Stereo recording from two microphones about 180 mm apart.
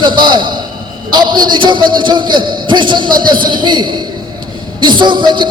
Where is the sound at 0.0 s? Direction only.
25° right (ahead or behind).